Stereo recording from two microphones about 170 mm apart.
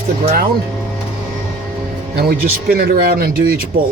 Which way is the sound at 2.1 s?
65° right (ahead or behind).